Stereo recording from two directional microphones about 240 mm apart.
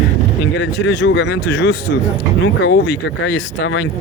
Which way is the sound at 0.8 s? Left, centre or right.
Left.